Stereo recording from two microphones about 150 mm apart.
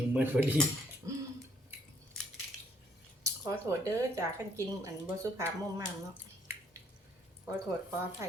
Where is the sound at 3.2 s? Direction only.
20° right (ahead or behind).